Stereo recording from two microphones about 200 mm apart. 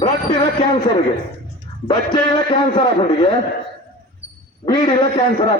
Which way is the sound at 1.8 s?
25° left (ahead or behind).